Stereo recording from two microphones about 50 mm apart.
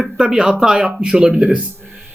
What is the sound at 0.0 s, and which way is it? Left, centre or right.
Speech, centre.